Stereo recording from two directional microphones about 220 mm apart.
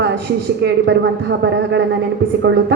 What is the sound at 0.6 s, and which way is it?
A woman's voice, 50° right (ahead or behind).